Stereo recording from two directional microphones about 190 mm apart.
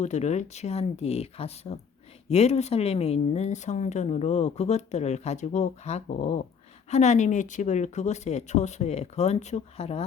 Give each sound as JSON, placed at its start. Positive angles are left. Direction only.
{"t": 0.0, "sound": "speech", "side_deg": 35}